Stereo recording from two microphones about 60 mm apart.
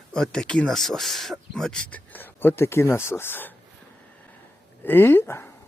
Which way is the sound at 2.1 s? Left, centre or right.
Left.